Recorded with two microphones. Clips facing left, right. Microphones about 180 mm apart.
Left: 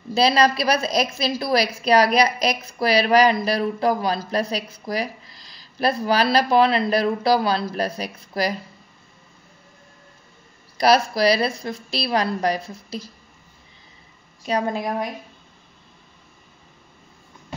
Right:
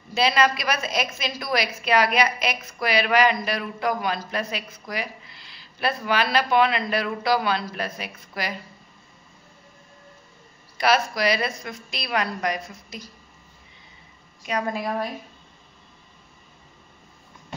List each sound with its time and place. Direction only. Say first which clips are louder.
0.1 s a woman's voice: left 3 dB; 35° left (ahead or behind)
10.8 s a woman's voice: left 4 dB; 35° left (ahead or behind)
14.4 s a woman's voice: left 4 dB; 35° left (ahead or behind)